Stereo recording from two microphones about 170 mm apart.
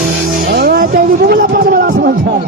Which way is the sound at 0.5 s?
65° right (ahead or behind).